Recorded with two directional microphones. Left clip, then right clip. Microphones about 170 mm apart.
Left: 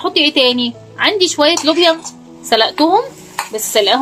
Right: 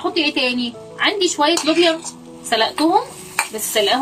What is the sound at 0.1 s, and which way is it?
Speech, 50° left (ahead or behind).